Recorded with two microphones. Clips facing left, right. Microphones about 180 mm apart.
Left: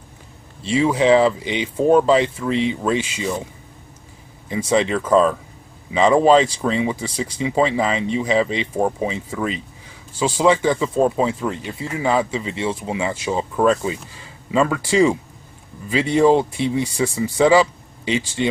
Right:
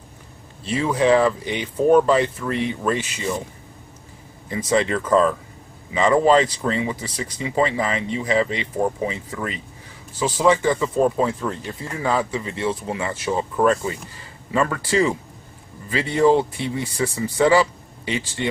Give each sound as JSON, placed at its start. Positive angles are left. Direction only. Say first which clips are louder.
{"t": 0.7, "sound": "speech", "louder": "left 3 dB", "side_deg": 15}
{"t": 4.5, "sound": "speech", "louder": "left 2 dB", "side_deg": 20}